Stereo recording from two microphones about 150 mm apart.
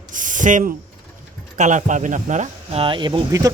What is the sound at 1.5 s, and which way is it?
Speech, 55° right (ahead or behind).